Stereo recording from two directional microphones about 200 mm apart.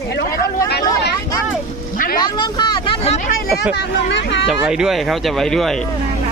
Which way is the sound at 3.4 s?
60° left (ahead or behind).